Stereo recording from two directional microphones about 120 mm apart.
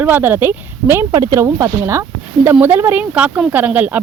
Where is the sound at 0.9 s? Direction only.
25° right (ahead or behind).